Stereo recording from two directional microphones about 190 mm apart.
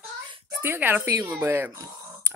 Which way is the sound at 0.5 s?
10° right (ahead or behind).